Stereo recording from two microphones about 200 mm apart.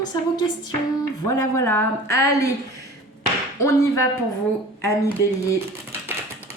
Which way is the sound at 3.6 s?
15° left (ahead or behind).